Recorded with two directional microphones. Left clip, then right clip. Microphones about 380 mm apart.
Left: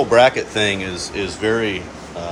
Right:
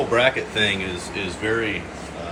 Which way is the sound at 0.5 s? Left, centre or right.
Left.